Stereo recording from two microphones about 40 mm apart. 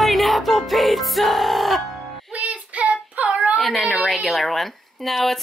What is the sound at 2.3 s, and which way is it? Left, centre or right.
Child singing, right.